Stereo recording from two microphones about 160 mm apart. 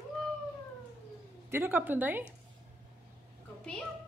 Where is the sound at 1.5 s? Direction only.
15° right (ahead or behind).